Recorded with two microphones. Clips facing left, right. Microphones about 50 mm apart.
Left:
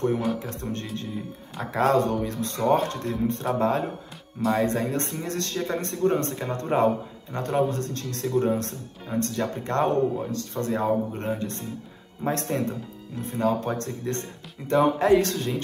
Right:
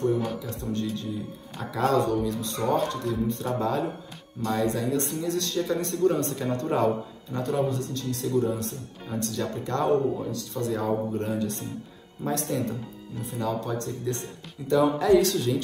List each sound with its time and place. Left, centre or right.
0.4 s speech: left
4.4 s speech: centre
4.6 s speech: left
9.2 s speech: left